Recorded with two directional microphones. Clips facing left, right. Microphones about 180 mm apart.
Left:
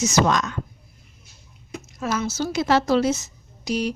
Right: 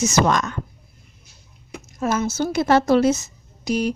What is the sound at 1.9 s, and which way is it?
A woman's voice, 50° right (ahead or behind).